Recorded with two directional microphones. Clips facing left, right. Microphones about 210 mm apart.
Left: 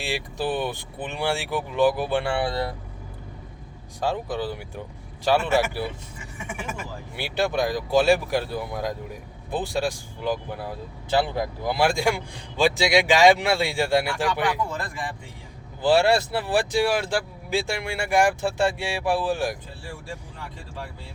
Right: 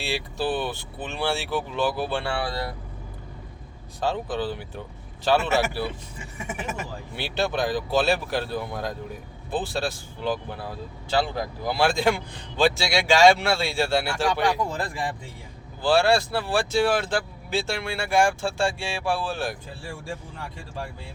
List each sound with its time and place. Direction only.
0.0 s speech: 15° left (ahead or behind)
4.0 s speech: 10° left (ahead or behind)
7.2 s speech: 10° left (ahead or behind)
14.8 s speech: 30° right (ahead or behind)
15.8 s speech: 20° left (ahead or behind)